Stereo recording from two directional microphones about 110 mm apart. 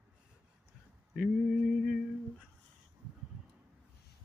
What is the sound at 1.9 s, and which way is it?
Humming, 5° right (ahead or behind).